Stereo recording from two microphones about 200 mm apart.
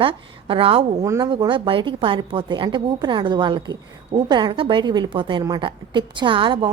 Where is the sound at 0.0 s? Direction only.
25° right (ahead or behind).